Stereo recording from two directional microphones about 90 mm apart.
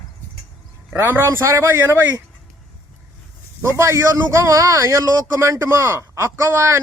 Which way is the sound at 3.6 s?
35° right (ahead or behind).